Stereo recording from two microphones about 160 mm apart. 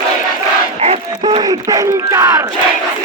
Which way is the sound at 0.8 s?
40° right (ahead or behind).